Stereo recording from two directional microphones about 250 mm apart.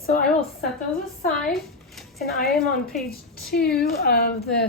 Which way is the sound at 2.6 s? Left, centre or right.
Left.